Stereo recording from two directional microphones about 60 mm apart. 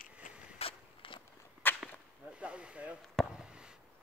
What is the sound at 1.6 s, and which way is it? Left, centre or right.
Whip, left.